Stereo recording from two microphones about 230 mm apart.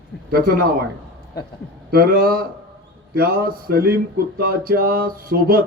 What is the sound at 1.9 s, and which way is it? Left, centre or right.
Speech, right.